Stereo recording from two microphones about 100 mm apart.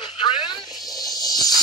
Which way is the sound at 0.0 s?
50° left (ahead or behind).